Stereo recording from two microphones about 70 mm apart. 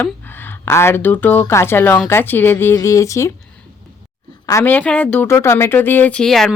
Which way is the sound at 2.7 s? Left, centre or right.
Left.